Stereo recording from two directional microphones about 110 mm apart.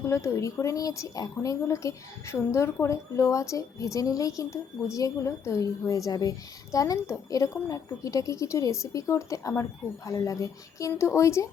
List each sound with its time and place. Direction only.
0.1 s a woman's voice: 30° left (ahead or behind)